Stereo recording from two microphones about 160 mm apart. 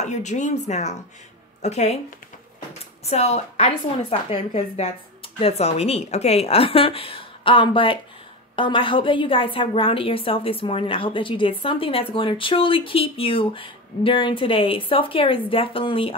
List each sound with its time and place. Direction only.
0.0 s speech: 45° left (ahead or behind)
3.1 s a woman's voice: 40° left (ahead or behind)